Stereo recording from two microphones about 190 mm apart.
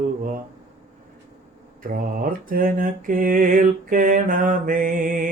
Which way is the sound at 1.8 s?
50° right (ahead or behind).